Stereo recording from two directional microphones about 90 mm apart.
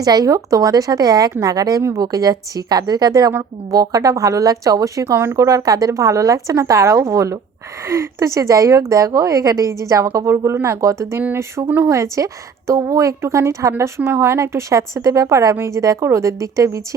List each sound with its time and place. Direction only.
0.0 s a woman's voice: 45° right (ahead or behind)